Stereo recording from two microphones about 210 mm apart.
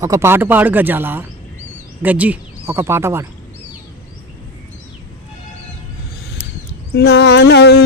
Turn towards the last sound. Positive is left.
turn(degrees=55)  # may be behind; listen again after turning